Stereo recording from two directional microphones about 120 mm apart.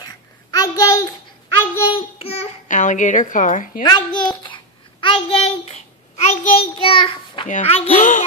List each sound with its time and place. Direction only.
0.0 s a sound: 30° left (ahead or behind)
1.9 s babbling: 55° left (ahead or behind); by 3.6 s 90° left
3.8 s a child's voice: 35° left (ahead or behind)
5.0 s child singing: 50° left (ahead or behind)
7.6 s speech: 55° left (ahead or behind)
8.0 s speech: 90° left